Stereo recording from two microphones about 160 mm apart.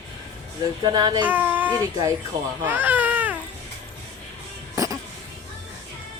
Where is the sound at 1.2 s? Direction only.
10° right (ahead or behind).